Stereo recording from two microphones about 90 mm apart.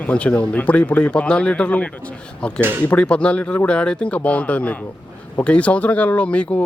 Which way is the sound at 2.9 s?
15° left (ahead or behind).